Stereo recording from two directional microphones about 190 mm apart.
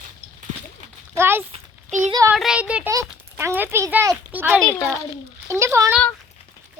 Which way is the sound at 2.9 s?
15° right (ahead or behind).